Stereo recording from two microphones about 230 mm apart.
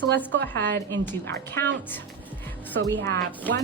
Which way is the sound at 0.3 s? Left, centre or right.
Right.